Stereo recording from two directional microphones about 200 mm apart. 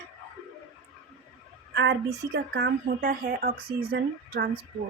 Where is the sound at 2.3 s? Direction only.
55° right (ahead or behind).